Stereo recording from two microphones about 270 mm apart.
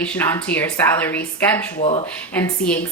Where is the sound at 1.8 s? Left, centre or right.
Left.